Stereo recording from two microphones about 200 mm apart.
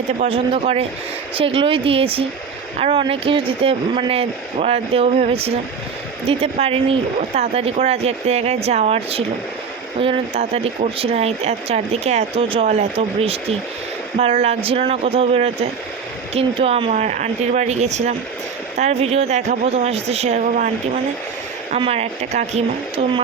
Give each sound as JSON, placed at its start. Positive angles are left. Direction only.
{"t": 0.2, "sound": "speech", "side_deg": -25}